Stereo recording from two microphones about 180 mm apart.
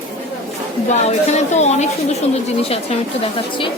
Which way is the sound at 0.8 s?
40° left (ahead or behind).